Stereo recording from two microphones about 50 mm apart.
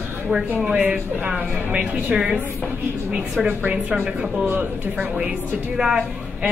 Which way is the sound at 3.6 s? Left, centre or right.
Right.